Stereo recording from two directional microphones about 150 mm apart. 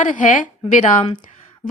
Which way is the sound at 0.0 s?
60° left (ahead or behind).